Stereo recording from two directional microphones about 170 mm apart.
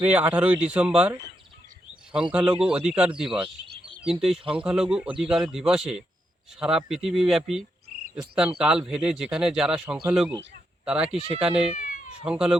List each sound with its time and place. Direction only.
0.0 s speech: 10° right (ahead or behind)
2.3 s speech: 5° right (ahead or behind)
11.7 s cat: 50° left (ahead or behind)
12.2 s speech: 5° right (ahead or behind)